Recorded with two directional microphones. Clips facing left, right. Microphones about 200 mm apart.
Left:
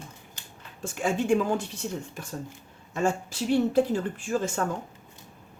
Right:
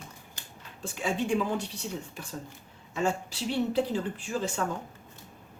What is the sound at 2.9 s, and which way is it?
Speech, 45° left (ahead or behind).